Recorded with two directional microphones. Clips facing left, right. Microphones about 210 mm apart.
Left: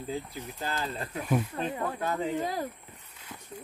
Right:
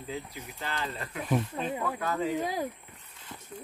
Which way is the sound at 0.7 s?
30° left (ahead or behind).